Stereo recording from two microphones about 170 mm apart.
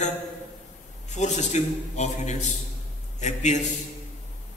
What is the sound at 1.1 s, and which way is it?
A man's voice, 45° left (ahead or behind).